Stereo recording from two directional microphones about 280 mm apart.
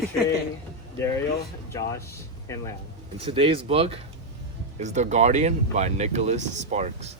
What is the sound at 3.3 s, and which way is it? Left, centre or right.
Speech, centre.